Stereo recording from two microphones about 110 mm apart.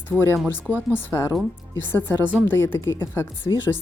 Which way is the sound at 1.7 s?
20° left (ahead or behind).